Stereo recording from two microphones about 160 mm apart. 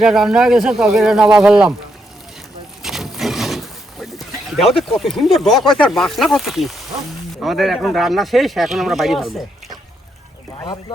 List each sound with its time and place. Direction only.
0.0 s speech: 5° right (ahead or behind)
2.8 s a sound: centre (ahead or behind)
4.8 s speech: centre (ahead or behind)
10.6 s speech: 25° left (ahead or behind)